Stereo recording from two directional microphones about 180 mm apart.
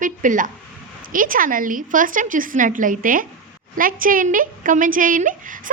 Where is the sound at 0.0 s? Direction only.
45° right (ahead or behind).